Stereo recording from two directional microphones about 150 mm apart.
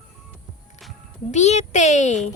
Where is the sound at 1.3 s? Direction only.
50° left (ahead or behind).